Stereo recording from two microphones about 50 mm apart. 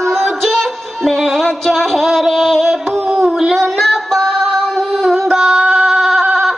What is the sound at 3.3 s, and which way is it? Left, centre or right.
Child singing, centre.